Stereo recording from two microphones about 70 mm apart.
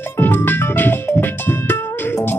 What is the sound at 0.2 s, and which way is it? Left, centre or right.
Music, left.